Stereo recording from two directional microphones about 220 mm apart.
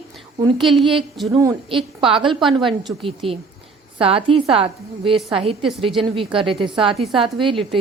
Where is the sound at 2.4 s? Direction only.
Centre (ahead or behind).